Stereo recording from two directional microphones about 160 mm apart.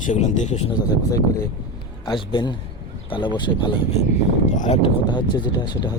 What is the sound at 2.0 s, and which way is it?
Speech, 30° left (ahead or behind).